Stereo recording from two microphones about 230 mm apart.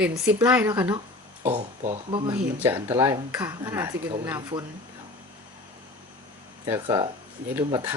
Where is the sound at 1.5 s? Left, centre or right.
Right.